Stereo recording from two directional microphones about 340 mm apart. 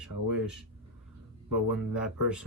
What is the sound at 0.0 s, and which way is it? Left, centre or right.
Speech, centre.